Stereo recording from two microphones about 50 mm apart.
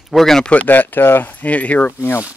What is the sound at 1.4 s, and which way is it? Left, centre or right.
Speech, left.